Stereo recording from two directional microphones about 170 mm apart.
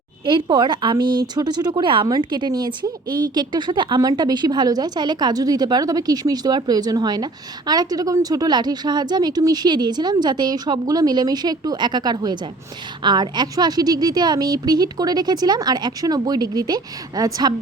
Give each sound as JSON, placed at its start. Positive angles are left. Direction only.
{"t": 0.3, "sound": "a woman's voice", "side_deg": -30}